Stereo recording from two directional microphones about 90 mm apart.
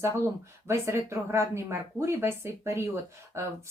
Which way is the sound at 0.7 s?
30° right (ahead or behind).